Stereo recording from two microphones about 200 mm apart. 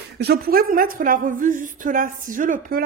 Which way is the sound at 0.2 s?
50° right (ahead or behind).